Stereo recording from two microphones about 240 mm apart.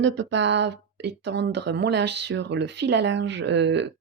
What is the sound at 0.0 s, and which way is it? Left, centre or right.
Speech, right.